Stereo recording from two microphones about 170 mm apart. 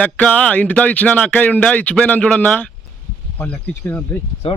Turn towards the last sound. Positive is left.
turn(degrees=35)  # may be behind; listen again after turning